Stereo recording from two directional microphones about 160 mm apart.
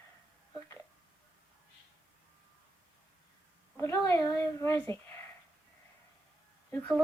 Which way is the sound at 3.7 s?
15° left (ahead or behind).